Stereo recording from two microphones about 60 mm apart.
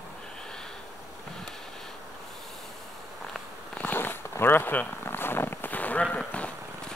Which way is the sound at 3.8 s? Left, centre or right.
Left.